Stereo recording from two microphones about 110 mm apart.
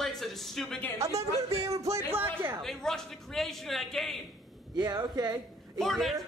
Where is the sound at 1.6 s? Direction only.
30° right (ahead or behind).